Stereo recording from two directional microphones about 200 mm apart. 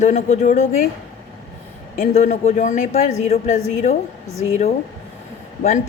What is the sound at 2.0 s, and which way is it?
A woman's voice, 35° left (ahead or behind).